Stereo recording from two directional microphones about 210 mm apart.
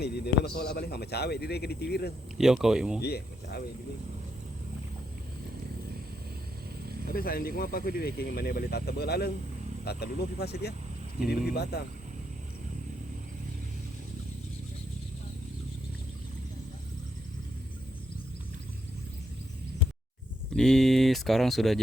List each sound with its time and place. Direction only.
0.0 s speech: 50° left (ahead or behind)
2.4 s speech: centre (ahead or behind)
3.0 s speech: 50° left (ahead or behind)
7.1 s speech: 45° left (ahead or behind)
20.6 s speech: centre (ahead or behind)